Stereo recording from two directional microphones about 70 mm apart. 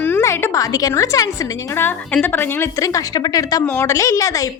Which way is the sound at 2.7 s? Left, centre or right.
Left.